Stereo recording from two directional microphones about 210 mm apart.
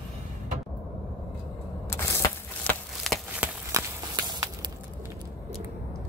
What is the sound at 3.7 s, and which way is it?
Walk, 15° right (ahead or behind).